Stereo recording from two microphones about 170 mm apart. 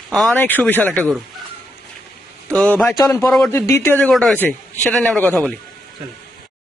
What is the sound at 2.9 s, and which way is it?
A man's voice, 20° left (ahead or behind).